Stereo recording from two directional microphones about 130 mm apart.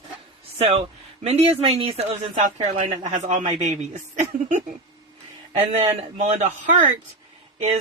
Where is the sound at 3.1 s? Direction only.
70° right (ahead or behind).